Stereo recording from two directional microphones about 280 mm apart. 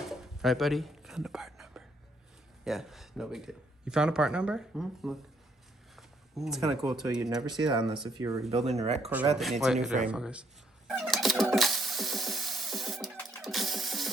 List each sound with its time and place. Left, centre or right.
0.0 s whispering: centre
2.6 s speech: centre
7.4 s speech: centre
8.4 s speech: right
9.0 s speech: centre
10.8 s a sound: centre